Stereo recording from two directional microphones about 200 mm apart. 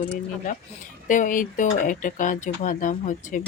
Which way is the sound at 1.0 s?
40° left (ahead or behind).